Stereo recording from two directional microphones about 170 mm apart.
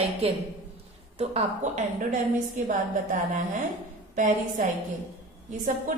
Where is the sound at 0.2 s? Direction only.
35° right (ahead or behind).